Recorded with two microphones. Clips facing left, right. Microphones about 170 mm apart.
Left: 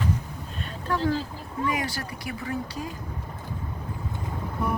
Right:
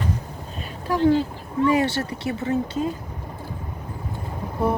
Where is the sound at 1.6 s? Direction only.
30° right (ahead or behind).